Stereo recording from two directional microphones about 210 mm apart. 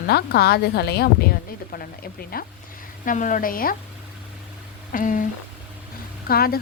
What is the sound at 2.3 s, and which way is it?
A woman's voice, 45° left (ahead or behind).